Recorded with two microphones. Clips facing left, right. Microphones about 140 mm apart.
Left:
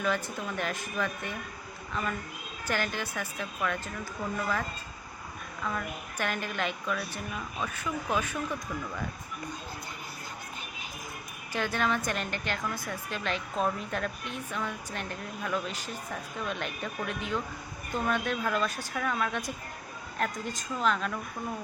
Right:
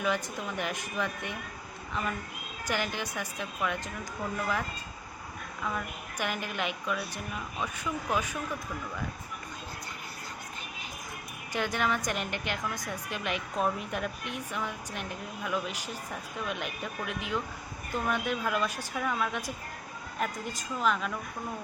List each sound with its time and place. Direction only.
0.0 s a woman's voice: 15° right (ahead or behind)
5.6 s a woman's voice: 10° right (ahead or behind)
11.5 s a woman's voice: 15° right (ahead or behind)